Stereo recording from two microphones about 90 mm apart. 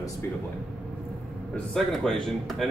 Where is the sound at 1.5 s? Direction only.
5° left (ahead or behind).